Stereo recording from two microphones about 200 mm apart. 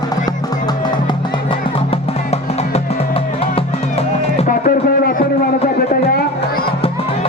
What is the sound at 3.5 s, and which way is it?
Music, 30° left (ahead or behind).